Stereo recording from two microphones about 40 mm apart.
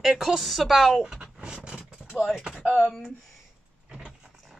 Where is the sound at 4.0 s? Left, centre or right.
Centre.